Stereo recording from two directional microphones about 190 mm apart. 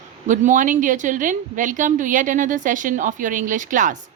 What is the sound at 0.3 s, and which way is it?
A woman's voice, 45° right (ahead or behind).